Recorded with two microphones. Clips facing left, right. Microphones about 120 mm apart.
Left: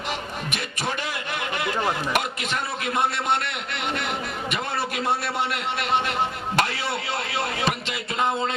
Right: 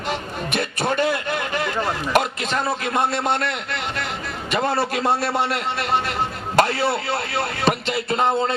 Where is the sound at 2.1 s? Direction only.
35° right (ahead or behind).